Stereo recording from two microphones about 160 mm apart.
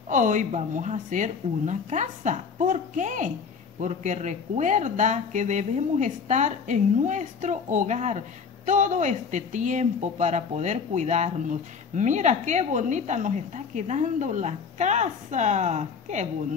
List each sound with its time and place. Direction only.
0.1 s speech: 50° right (ahead or behind)